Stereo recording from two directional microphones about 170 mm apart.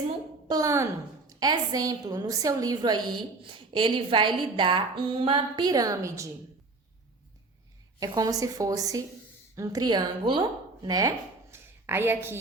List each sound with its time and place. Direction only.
0.4 s a woman's voice: 20° right (ahead or behind)
7.9 s a woman's voice: 20° right (ahead or behind)
11.5 s a sound: 15° right (ahead or behind)